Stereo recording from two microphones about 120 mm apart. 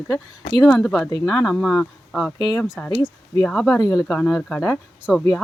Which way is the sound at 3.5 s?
5° left (ahead or behind).